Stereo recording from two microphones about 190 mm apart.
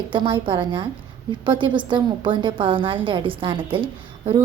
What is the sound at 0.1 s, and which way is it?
A woman's voice, 25° right (ahead or behind).